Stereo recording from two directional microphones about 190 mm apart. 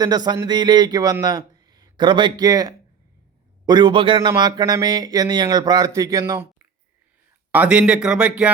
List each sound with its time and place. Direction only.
0.0 s speech: 20° right (ahead or behind); by 8.4 s 5° right (ahead or behind)